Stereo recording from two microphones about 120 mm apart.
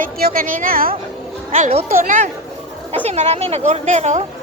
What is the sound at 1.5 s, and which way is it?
Speech, 90° right.